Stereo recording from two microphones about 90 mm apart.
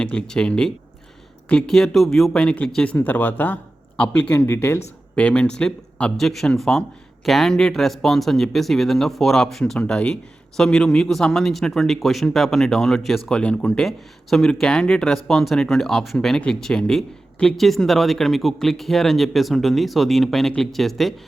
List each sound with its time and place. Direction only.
0.0 s speech: 10° left (ahead or behind)
4.4 s speech: 30° left (ahead or behind)
5.1 s speech: 10° left (ahead or behind)